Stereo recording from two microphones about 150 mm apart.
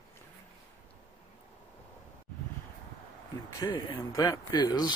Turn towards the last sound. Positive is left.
turn(degrees=25)  # may be behind; listen again after turning